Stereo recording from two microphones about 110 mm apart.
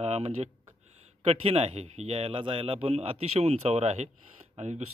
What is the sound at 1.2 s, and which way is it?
A man's voice, 65° right (ahead or behind).